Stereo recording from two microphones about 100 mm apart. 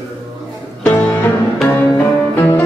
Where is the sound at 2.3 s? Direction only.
20° left (ahead or behind).